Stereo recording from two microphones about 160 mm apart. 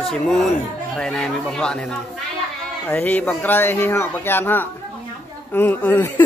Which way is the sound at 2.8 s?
10° left (ahead or behind).